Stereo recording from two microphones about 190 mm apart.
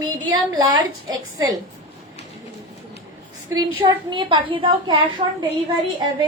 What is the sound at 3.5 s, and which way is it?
A woman's voice, 25° right (ahead or behind).